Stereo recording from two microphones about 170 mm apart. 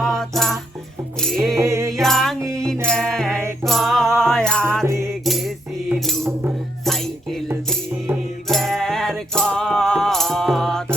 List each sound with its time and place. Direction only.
0.0 s music: centre (ahead or behind)
1.5 s music: 15° right (ahead or behind)
2.0 s music: centre (ahead or behind)
6.8 s cutlery: centre (ahead or behind)
8.4 s music: centre (ahead or behind)